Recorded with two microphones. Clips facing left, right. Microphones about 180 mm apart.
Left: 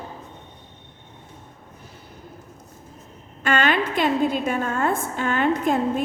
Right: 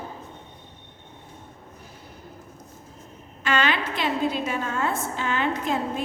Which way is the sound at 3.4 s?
50° left (ahead or behind).